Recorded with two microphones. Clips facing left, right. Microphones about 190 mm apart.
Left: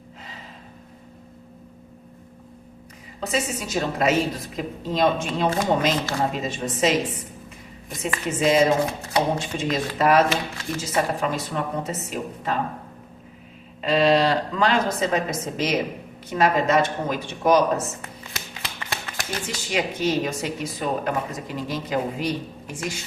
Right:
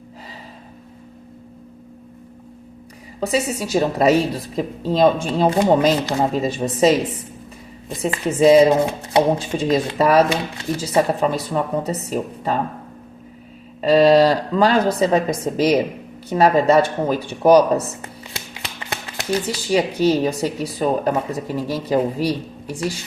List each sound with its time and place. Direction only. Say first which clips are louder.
3.2 s speech: right 5 dB; 35° right (ahead or behind)
13.8 s speech: right 6 dB; 40° right (ahead or behind)
18.3 s music: right 1 dB; 25° right (ahead or behind)
19.5 s speech: right 5 dB; 35° right (ahead or behind)